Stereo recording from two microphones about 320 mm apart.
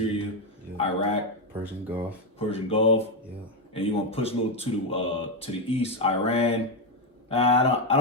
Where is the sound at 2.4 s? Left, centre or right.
Centre.